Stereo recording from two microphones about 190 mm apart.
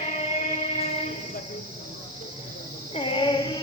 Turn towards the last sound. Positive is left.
turn(degrees=25)  # may be behind; listen again after turning